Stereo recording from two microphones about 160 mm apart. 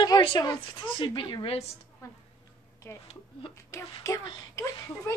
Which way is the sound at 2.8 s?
15° left (ahead or behind).